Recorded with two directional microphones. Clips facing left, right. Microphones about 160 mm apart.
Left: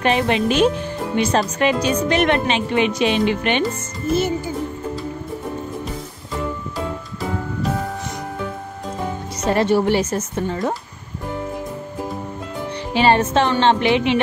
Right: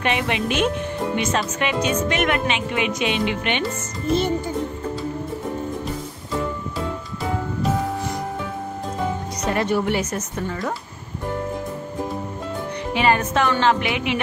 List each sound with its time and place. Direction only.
0.0 s speech: 35° left (ahead or behind)
9.4 s speech: 30° left (ahead or behind)
12.9 s speech: 30° left (ahead or behind)